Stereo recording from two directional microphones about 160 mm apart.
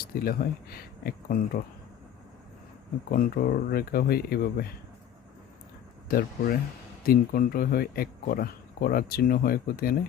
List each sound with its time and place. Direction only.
0.1 s speech: 70° left (ahead or behind)
3.1 s speech: 65° left (ahead or behind)
6.1 s speech: 65° left (ahead or behind)